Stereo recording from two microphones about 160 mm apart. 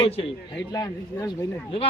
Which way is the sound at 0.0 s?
35° left (ahead or behind).